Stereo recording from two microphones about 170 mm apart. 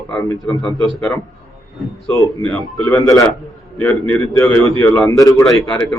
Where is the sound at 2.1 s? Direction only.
20° left (ahead or behind).